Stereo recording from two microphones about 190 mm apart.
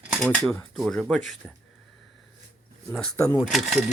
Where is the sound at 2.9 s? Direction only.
10° left (ahead or behind).